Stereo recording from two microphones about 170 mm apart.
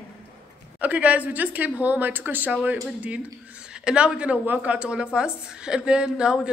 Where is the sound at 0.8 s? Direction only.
10° right (ahead or behind).